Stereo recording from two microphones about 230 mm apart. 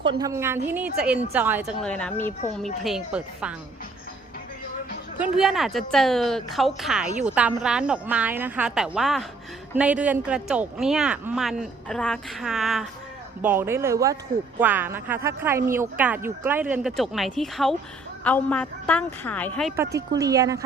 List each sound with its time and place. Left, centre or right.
0.0 s speech: centre
1.8 s speech: centre
2.4 s speech: left
2.8 s speech: centre
5.2 s a woman's voice: centre
19.7 s speech: centre